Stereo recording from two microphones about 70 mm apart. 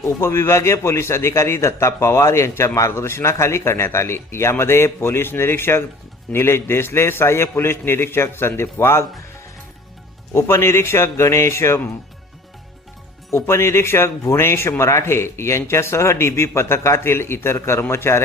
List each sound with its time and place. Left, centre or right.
0.0 s a man's voice: left
10.3 s a man's voice: left
13.3 s a man's voice: left